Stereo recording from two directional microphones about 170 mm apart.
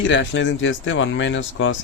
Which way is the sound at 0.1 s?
90° left.